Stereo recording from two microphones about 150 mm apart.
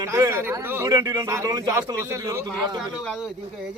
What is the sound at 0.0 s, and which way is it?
Speech, 20° right (ahead or behind).